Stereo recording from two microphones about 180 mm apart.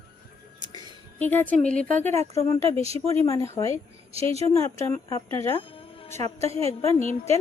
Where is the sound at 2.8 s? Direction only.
35° right (ahead or behind).